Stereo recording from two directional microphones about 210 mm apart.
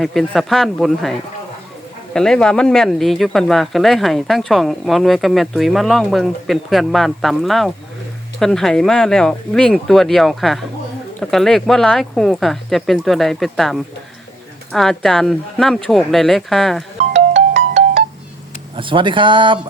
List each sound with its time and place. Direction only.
0.0 s speech: centre (ahead or behind)
2.1 s speech: 5° left (ahead or behind)
17.0 s music: 30° right (ahead or behind)
18.8 s speech: 25° right (ahead or behind)